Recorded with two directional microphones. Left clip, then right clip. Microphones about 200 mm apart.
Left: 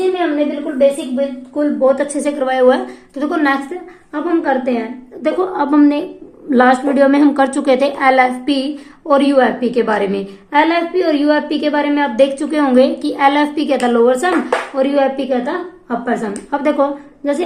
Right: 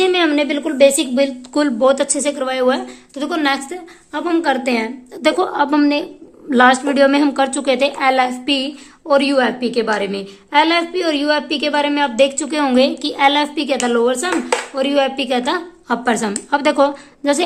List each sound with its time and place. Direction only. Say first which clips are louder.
0.8 s a woman's voice: right 1 dB; 60° right (ahead or behind)
1.8 s a woman's voice: left 1 dB; 25° right (ahead or behind)
5.2 s a woman's voice: right 1 dB; 20° right (ahead or behind); by 16.3 s 35° right (ahead or behind)
16.5 s a woman's voice: right 1 dB; 20° right (ahead or behind)